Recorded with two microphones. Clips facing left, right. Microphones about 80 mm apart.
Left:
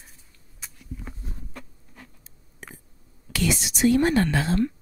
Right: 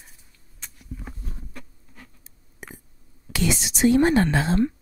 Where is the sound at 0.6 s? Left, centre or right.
Centre.